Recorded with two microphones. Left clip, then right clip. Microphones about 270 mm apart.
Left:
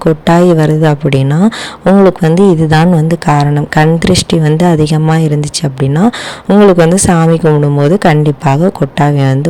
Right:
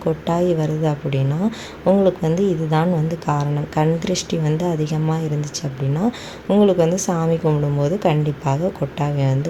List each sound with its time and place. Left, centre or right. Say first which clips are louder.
0.0 s speech: left 11 dB; left